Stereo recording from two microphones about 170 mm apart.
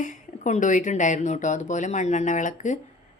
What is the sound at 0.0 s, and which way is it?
Speech, 45° left (ahead or behind).